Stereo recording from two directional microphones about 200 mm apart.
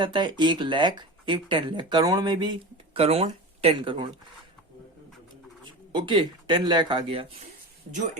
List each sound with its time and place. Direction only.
0.0 s speech: 25° right (ahead or behind)
5.9 s speech: 25° right (ahead or behind)